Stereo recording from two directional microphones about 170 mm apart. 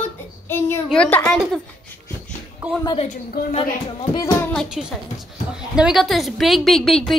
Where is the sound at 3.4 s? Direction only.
65° left (ahead or behind).